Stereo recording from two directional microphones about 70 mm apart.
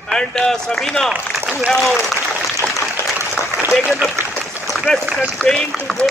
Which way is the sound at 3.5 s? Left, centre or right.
Right.